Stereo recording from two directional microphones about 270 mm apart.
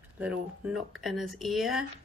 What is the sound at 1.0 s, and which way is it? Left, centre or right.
Speech, centre.